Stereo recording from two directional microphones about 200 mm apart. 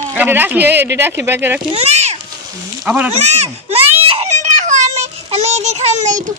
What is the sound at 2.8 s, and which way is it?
Speech, 5° right (ahead or behind).